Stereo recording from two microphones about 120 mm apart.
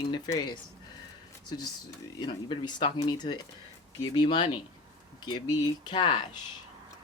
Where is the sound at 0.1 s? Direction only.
35° left (ahead or behind).